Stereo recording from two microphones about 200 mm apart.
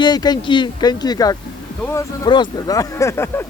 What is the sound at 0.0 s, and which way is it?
Speech, 20° left (ahead or behind).